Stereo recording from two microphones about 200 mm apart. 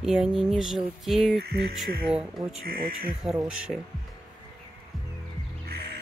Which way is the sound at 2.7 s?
45° right (ahead or behind).